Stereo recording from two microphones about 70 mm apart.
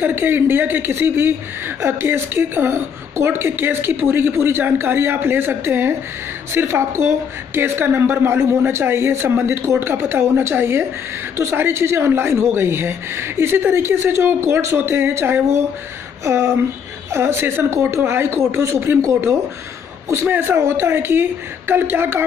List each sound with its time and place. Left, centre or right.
0.0 s speech: right